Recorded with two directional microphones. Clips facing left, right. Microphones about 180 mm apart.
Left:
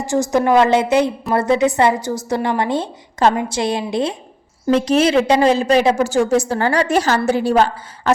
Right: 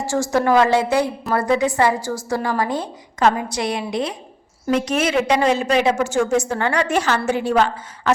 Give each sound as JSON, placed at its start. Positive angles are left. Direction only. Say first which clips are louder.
{"t": 0.0, "sound": "a woman's voice", "louder": "left 2 dB", "side_deg": 20}